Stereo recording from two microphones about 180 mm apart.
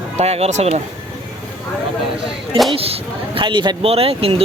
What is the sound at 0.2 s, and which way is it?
Speech, 35° right (ahead or behind).